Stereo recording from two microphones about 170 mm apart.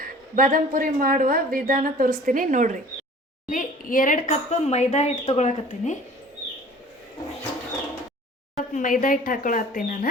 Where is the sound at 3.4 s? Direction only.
55° left (ahead or behind).